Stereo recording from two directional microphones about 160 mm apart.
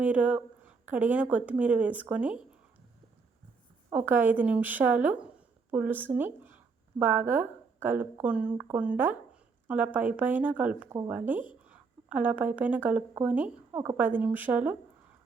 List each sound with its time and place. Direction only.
0.0 s speech: 10° right (ahead or behind)
3.9 s speech: 10° right (ahead or behind)
6.1 s a sound: 10° right (ahead or behind)
7.0 s a woman's voice: 10° right (ahead or behind)
10.8 s speech: 20° right (ahead or behind)
11.1 s speech: 10° right (ahead or behind)